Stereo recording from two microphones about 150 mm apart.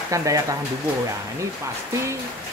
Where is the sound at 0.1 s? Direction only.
20° right (ahead or behind).